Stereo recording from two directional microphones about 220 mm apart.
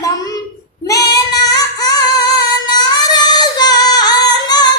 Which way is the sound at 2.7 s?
20° left (ahead or behind).